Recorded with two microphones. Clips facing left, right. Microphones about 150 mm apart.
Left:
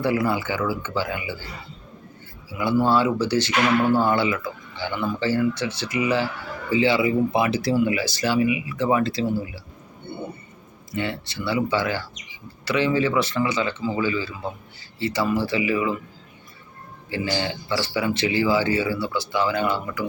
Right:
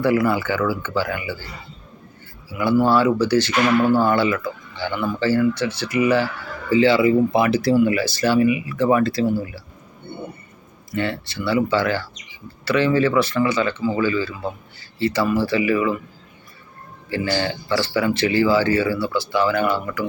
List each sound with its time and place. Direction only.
0.0 s speech: 25° left (ahead or behind)
2.8 s speech: 20° left (ahead or behind)
10.9 s speech: 15° left (ahead or behind)
17.1 s speech: 15° left (ahead or behind)